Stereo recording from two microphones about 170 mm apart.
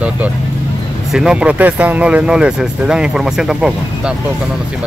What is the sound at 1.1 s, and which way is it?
Speech, 5° right (ahead or behind).